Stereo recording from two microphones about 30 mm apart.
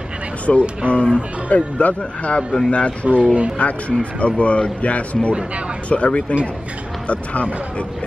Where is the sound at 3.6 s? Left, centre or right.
Left.